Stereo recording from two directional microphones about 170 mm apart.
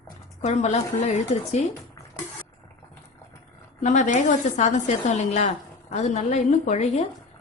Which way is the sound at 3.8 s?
45° left (ahead or behind).